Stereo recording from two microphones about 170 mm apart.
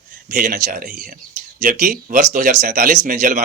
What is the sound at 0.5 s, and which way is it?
Speech, 55° right (ahead or behind).